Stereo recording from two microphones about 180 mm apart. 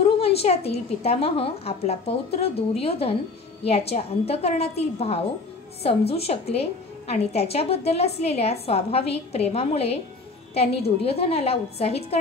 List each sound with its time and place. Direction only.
0.0 s a woman's voice: 35° left (ahead or behind)